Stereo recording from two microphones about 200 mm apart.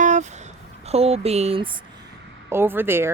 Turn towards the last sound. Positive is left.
turn(degrees=-10)  # may be behind; listen again after turning